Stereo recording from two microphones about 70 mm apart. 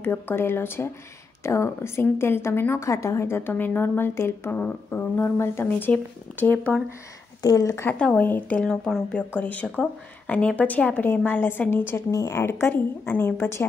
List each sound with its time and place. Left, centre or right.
0.0 s a woman's voice: left
1.4 s a woman's voice: left
7.4 s a woman's voice: left
8.1 s a woman's voice: left
8.5 s speech: centre
9.1 s a woman's voice: left
12.1 s a woman's voice: left